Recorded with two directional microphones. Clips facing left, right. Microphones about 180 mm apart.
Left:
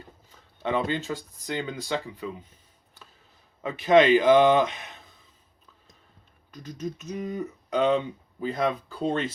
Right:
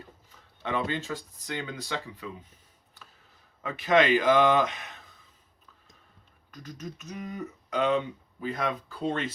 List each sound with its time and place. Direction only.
0.6 s speech: 30° left (ahead or behind)
3.6 s speech: 25° left (ahead or behind)
6.5 s speech: 25° left (ahead or behind)